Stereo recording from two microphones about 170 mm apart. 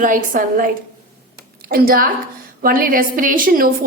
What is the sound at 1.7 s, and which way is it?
A woman's voice, 60° right (ahead or behind).